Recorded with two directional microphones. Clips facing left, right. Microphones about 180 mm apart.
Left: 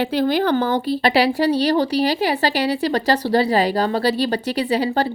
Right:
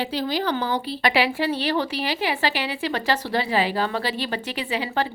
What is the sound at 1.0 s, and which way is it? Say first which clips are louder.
A woman's voice: left 4 dB; 35° left (ahead or behind).